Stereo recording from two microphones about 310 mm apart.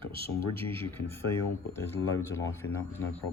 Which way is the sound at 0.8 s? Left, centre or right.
Centre.